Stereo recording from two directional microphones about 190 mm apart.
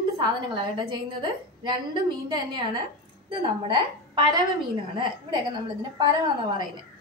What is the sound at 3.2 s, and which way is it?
A woman's voice, 25° right (ahead or behind).